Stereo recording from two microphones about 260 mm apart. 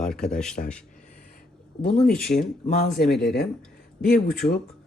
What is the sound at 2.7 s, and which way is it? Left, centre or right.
Speech, left.